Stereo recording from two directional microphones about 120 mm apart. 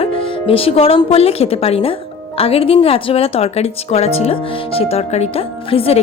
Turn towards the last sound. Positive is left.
turn(degrees=50)  # may be behind; listen again after turning